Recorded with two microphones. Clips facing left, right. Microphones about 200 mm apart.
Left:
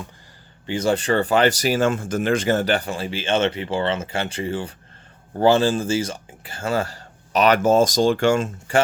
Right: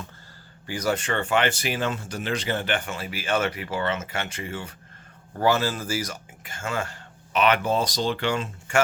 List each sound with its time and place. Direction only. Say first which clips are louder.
0.7 s speech: left 6 dB; 30° left (ahead or behind); by 8.7 s 45° left (ahead or behind)